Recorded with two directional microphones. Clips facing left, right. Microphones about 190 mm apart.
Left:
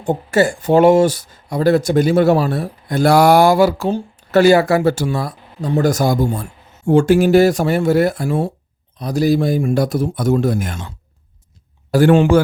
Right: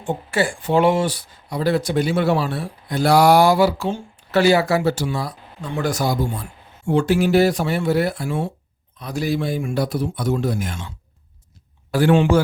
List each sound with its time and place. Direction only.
0.0 s speech: 40° left (ahead or behind)